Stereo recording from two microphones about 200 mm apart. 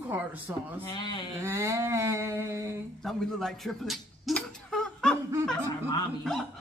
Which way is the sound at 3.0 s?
Centre (ahead or behind).